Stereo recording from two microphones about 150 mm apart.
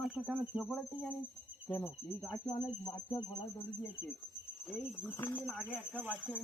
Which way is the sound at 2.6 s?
30° left (ahead or behind).